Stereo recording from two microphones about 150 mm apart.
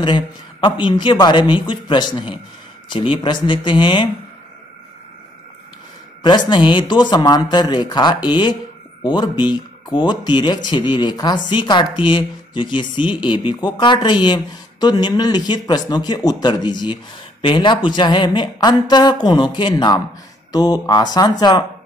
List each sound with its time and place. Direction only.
0.0 s speech: 30° left (ahead or behind)
6.2 s speech: 30° left (ahead or behind)